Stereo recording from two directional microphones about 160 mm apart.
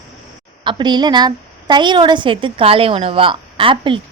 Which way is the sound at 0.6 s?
30° right (ahead or behind).